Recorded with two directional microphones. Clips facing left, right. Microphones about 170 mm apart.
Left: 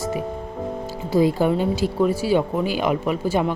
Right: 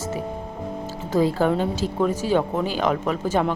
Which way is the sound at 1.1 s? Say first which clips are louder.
Left 2 dB; 10° left (ahead or behind).